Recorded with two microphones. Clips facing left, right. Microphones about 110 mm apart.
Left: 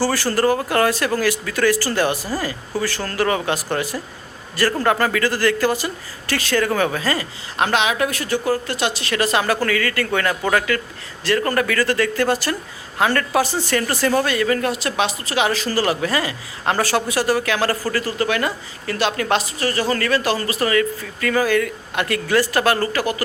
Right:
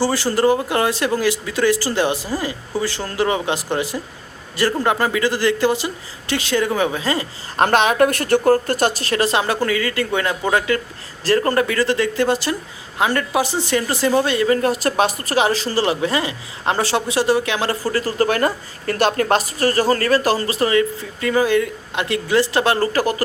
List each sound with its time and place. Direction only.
0.0 s speech: 20° right (ahead or behind)
7.5 s a woman's voice: 45° right (ahead or behind)
15.4 s speech: 30° right (ahead or behind)
18.0 s a woman's voice: 40° right (ahead or behind)